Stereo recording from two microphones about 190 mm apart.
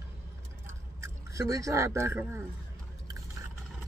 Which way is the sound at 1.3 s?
15° right (ahead or behind).